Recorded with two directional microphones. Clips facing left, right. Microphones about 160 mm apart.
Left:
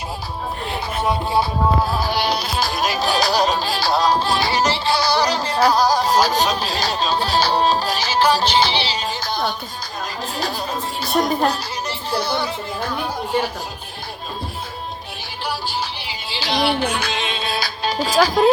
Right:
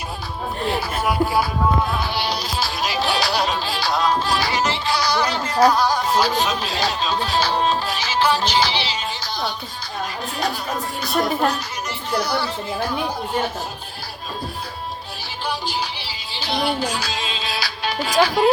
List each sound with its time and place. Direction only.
1.0 s music: 25° left (ahead or behind)
1.9 s music: 40° left (ahead or behind)
9.2 s music: 55° left (ahead or behind)
11.2 s speech: 35° left (ahead or behind)
16.3 s music: 90° left; by 17.9 s 50° left (ahead or behind)
17.9 s speech: 40° left (ahead or behind)